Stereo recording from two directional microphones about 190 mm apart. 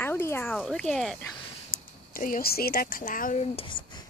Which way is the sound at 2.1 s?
45° left (ahead or behind).